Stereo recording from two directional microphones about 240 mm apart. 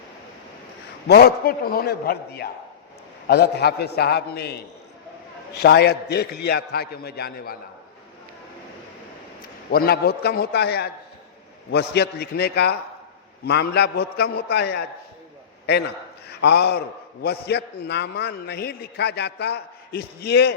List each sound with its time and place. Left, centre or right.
1.0 s a man's voice: left
5.6 s a man's voice: left
9.7 s a man's voice: left